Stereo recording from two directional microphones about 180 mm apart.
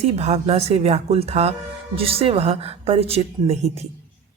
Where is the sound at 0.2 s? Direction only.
35° right (ahead or behind).